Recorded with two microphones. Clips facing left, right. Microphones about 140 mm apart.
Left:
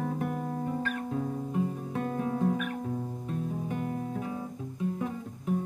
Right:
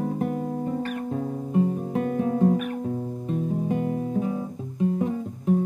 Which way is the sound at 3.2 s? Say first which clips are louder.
Right 7 dB; 30° right (ahead or behind).